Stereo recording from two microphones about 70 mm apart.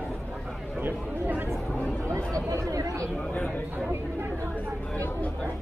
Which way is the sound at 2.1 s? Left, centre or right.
Right.